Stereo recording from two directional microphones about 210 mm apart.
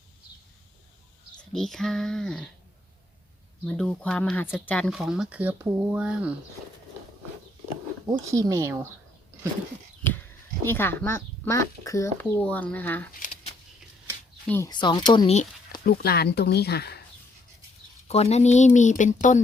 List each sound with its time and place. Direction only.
1.5 s speech: centre (ahead or behind)
3.7 s speech: 5° left (ahead or behind)
8.3 s speech: 15° right (ahead or behind)
10.0 s a sound: 10° left (ahead or behind)
10.7 s speech: 10° left (ahead or behind)
13.1 s a sound: 40° left (ahead or behind)
14.4 s speech: 10° left (ahead or behind)
14.7 s speech: 20° left (ahead or behind)
15.8 s speech: 50° left (ahead or behind)
18.1 s speech: 30° left (ahead or behind)